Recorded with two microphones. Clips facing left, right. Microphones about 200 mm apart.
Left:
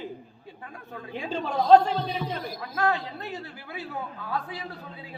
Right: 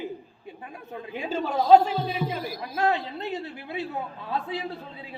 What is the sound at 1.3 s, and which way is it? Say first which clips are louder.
A man's voice: right 1 dB; 5° right (ahead or behind).